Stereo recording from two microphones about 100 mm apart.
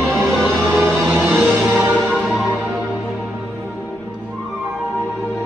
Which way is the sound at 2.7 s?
10° right (ahead or behind).